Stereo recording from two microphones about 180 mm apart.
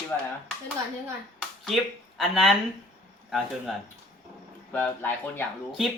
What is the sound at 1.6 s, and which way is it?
Speech, centre (ahead or behind).